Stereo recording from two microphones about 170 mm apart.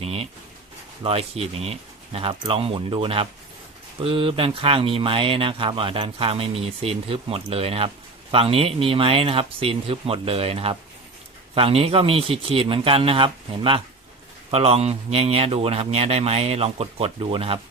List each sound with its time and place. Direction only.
0.0 s speech: 35° right (ahead or behind)